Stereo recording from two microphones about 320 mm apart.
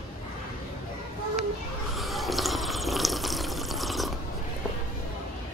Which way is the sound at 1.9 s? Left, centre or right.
Centre.